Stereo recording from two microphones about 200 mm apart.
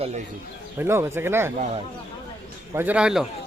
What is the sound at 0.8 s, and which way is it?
Speech, 10° right (ahead or behind).